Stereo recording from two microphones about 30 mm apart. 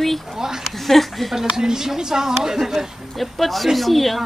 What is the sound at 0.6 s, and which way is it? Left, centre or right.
Speech, centre.